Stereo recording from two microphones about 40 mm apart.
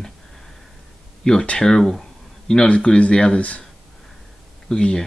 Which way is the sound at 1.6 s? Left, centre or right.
Centre.